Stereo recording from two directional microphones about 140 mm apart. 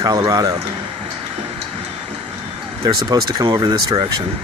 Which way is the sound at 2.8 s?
25° right (ahead or behind).